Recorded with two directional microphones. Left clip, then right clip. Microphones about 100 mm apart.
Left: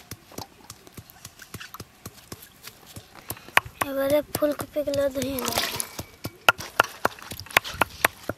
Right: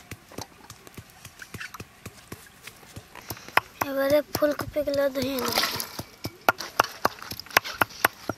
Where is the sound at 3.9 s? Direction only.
Centre (ahead or behind).